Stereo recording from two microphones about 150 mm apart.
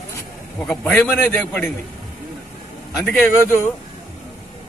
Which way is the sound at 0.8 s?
5° left (ahead or behind).